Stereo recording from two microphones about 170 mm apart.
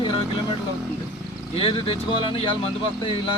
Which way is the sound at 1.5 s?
35° left (ahead or behind).